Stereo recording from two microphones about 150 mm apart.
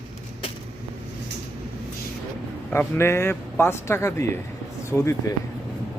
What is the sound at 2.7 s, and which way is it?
A man's voice, 15° left (ahead or behind).